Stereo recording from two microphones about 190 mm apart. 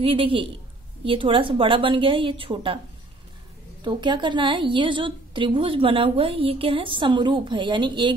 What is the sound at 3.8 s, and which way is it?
A woman's voice, 25° right (ahead or behind).